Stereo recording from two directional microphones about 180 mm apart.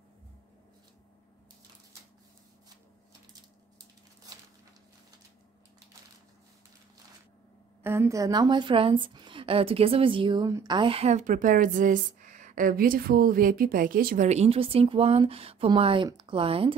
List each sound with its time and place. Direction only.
7.8 s a woman's voice: 15° right (ahead or behind); by 16.7 s 30° right (ahead or behind)